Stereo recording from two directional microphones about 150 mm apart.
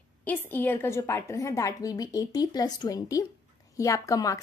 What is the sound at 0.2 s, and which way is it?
A woman's voice, 10° left (ahead or behind).